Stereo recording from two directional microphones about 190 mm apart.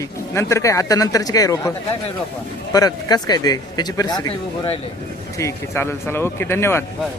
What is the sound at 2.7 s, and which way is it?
Speech, 20° left (ahead or behind).